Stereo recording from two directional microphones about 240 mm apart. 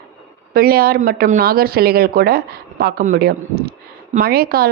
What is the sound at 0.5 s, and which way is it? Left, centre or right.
Speech, right.